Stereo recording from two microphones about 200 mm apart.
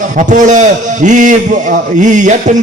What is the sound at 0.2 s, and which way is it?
A man's voice, 40° right (ahead or behind).